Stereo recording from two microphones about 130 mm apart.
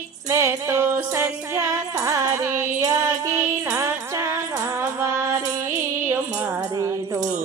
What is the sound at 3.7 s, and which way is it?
Music, 20° right (ahead or behind).